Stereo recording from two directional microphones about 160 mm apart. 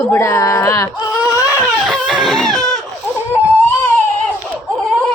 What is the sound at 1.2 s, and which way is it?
Baby cry, 5° right (ahead or behind).